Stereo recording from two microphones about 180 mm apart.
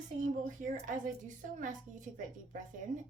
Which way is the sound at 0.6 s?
45° right (ahead or behind).